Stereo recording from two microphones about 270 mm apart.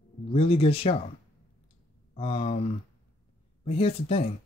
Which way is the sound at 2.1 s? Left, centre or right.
Centre.